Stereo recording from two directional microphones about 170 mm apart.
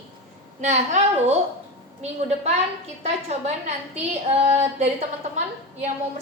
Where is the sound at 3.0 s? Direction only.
40° right (ahead or behind).